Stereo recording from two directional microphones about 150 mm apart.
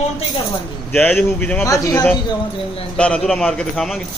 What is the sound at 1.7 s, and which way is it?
Speech, 20° left (ahead or behind).